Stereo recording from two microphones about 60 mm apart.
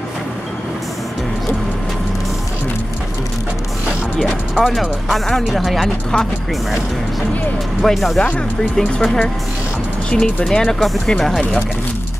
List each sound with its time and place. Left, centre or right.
4.2 s speech: centre
7.8 s speech: centre